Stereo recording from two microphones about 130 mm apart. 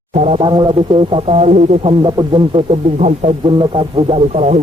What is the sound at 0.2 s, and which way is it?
Speech, 55° right (ahead or behind).